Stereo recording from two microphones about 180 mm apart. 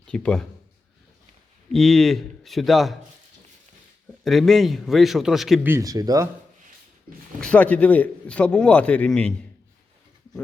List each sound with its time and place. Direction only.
0.1 s a man's voice: 5° left (ahead or behind)
1.7 s a man's voice: centre (ahead or behind)
4.2 s a man's voice: centre (ahead or behind)
5.6 s speech: 15° right (ahead or behind)
7.1 s speech: 55° right (ahead or behind)
7.4 s a man's voice: 10° left (ahead or behind)